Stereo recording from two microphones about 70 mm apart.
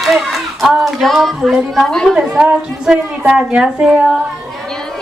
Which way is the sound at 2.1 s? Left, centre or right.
Centre.